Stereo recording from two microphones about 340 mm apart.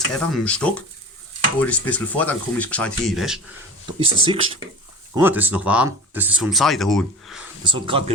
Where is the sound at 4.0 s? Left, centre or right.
Centre.